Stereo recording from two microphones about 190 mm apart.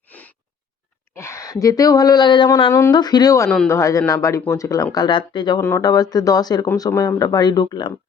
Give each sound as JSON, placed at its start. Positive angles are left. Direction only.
{"t": 0.1, "sound": "a sound", "side_deg": 10}
{"t": 1.6, "sound": "speech", "side_deg": 20}
{"t": 3.5, "sound": "speech", "side_deg": 5}
{"t": 3.8, "sound": "speech", "side_deg": 15}